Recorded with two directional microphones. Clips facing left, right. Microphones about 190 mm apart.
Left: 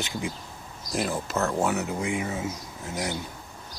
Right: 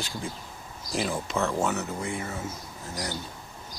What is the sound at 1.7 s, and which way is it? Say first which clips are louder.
Speech: left 3 dB; 15° left (ahead or behind).